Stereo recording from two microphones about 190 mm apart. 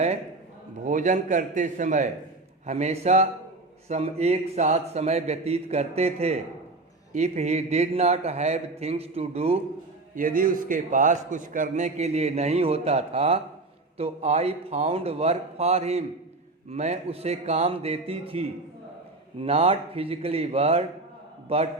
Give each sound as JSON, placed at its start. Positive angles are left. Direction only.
{"t": 0.9, "sound": "a man's voice", "side_deg": -40}
{"t": 10.2, "sound": "a man's voice", "side_deg": -45}